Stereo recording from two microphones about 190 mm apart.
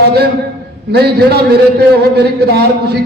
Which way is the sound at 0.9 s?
55° right (ahead or behind).